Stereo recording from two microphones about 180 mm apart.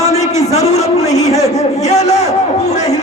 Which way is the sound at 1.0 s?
20° left (ahead or behind).